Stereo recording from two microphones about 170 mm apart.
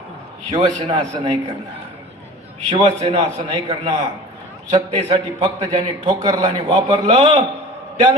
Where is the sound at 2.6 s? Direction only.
40° right (ahead or behind).